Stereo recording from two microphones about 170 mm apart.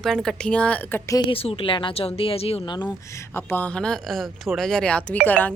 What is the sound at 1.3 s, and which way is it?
Speech, 35° left (ahead or behind).